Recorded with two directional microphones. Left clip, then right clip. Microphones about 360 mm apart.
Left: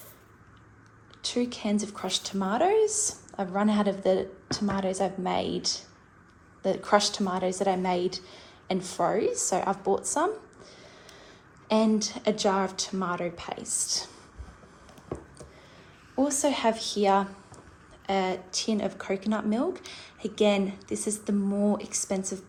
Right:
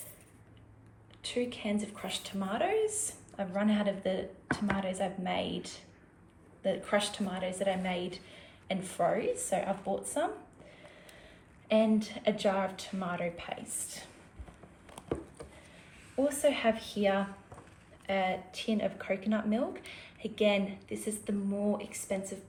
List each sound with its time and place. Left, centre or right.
1.3 s a woman's voice: centre
6.9 s speech: left
7.4 s a woman's voice: centre
9.6 s speech: left
11.7 s a woman's voice: centre
16.2 s a woman's voice: centre